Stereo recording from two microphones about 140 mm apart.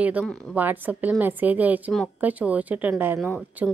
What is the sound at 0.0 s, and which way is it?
Speech, 10° right (ahead or behind).